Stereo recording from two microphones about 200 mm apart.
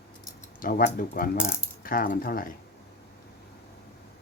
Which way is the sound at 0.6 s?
45° left (ahead or behind).